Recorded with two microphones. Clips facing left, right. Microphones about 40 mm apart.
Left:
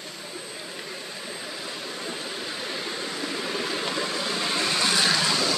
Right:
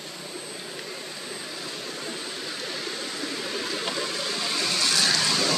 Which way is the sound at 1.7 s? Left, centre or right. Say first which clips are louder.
Left 1 dB; centre.